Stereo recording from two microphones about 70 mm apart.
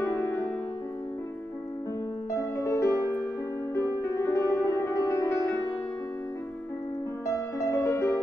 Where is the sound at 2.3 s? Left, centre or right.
Left.